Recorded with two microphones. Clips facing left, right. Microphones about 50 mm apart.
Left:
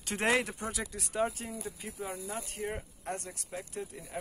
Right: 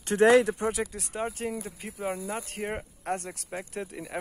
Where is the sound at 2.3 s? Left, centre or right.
Right.